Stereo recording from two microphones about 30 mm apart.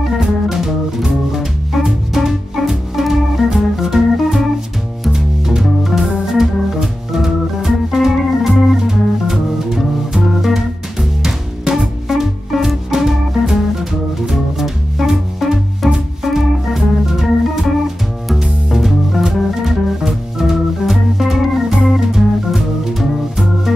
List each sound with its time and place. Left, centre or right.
0.1 s music: centre
2.1 s organ: centre
5.1 s music: centre
5.6 s organ: centre
8.8 s music: centre
16.6 s organ: centre
18.3 s music: centre
20.1 s organ: centre